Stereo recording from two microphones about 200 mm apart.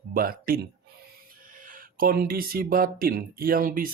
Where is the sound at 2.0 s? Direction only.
50° right (ahead or behind).